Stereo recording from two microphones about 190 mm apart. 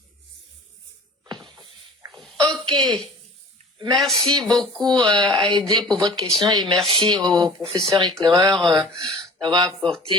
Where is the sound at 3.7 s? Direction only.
25° right (ahead or behind).